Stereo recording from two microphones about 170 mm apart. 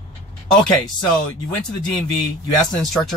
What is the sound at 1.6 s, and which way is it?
A man's voice, 5° left (ahead or behind).